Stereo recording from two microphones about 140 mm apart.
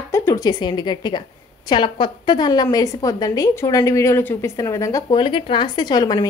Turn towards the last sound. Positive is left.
turn(degrees=30)  # may be behind; listen again after turning